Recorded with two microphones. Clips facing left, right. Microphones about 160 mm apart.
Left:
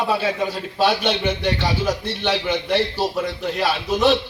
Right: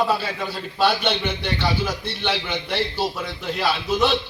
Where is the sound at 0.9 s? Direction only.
45° left (ahead or behind).